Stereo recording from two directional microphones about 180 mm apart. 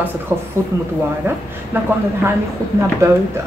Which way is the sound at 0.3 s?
15° right (ahead or behind).